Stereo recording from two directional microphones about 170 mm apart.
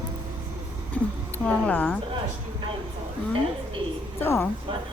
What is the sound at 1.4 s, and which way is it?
Speech, 5° left (ahead or behind).